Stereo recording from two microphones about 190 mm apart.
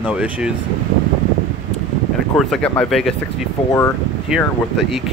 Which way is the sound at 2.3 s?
5° left (ahead or behind).